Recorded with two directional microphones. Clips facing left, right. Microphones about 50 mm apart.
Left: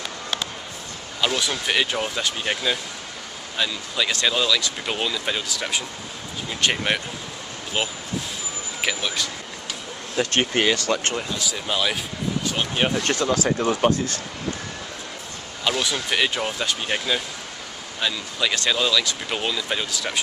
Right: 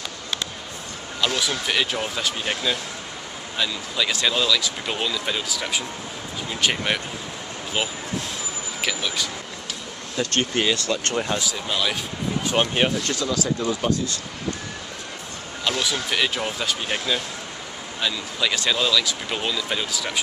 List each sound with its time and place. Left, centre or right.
1.2 s speech: centre
5.5 s speech: centre
10.1 s speech: centre
11.4 s speech: centre
12.4 s speech: centre
13.0 s speech: left
15.6 s speech: centre